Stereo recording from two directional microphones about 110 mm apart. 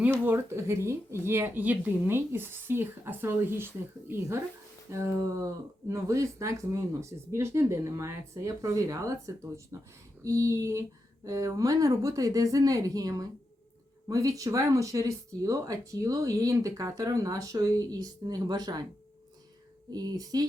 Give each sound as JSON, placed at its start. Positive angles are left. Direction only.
{"t": 0.1, "sound": "speech", "side_deg": -20}
{"t": 19.9, "sound": "speech", "side_deg": -35}